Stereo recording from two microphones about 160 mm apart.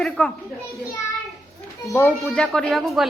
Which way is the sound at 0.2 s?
5° left (ahead or behind).